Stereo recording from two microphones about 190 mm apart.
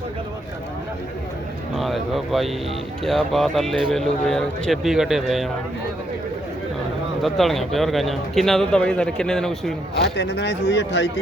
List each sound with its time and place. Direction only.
1.8 s a man's voice: centre (ahead or behind)
7.2 s a man's voice: centre (ahead or behind)
10.0 s speech: 65° left (ahead or behind)